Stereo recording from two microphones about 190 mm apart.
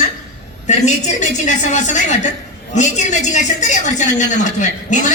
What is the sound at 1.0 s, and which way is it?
A woman's voice, 40° left (ahead or behind).